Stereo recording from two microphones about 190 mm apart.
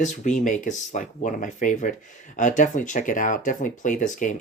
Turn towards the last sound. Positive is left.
turn(degrees=40)  # may be behind; listen again after turning